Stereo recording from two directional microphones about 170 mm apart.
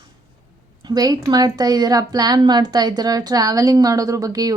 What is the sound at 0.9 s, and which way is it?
Speech, 20° right (ahead or behind).